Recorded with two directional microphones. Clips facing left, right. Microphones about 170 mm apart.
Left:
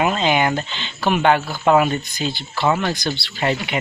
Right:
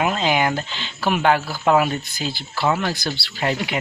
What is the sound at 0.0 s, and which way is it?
Speech, centre (ahead or behind).